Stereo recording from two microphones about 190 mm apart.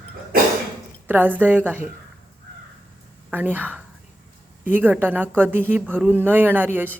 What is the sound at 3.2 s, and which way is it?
A woman's voice, 10° right (ahead or behind).